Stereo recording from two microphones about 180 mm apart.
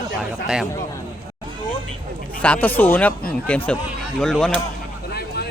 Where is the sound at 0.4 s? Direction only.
5° right (ahead or behind).